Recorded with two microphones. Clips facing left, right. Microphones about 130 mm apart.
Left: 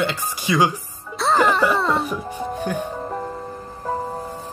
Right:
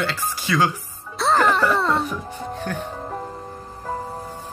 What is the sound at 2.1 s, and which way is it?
Speech, 10° left (ahead or behind).